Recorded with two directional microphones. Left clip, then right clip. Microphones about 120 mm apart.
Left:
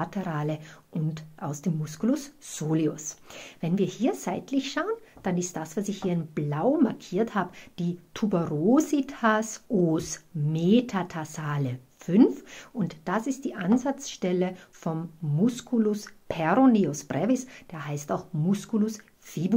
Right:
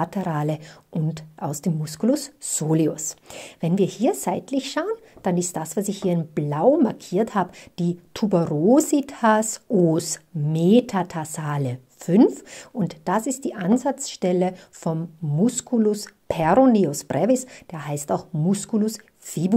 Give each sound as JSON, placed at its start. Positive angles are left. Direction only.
{"t": 0.0, "sound": "a woman's voice", "side_deg": -50}